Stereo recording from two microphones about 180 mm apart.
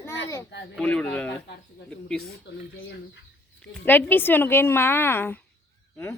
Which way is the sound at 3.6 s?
10° left (ahead or behind).